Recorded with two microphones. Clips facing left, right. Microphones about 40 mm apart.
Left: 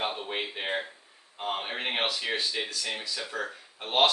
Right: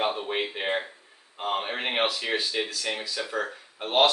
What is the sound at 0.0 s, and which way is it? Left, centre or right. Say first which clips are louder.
Speech: right 4 dB; centre.